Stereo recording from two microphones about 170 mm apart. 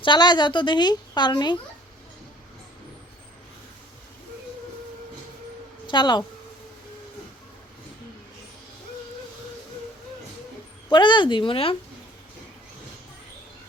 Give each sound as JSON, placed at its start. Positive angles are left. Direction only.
{"t": 0.0, "sound": "a woman's voice", "side_deg": 25}
{"t": 5.9, "sound": "a woman's voice", "side_deg": 25}
{"t": 10.8, "sound": "a woman's voice", "side_deg": 25}